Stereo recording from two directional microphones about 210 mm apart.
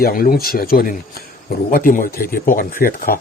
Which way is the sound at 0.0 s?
45° left (ahead or behind).